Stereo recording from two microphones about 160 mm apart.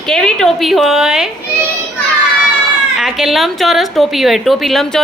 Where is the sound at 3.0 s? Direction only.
Centre (ahead or behind).